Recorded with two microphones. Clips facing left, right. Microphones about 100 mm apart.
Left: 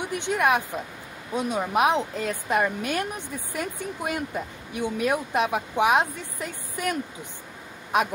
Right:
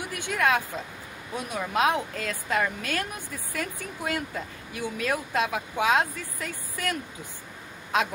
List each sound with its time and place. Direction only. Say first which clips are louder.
0.0 s speech: left 3 dB; 20° left (ahead or behind)